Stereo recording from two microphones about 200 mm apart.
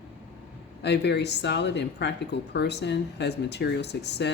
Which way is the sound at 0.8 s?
55° left (ahead or behind).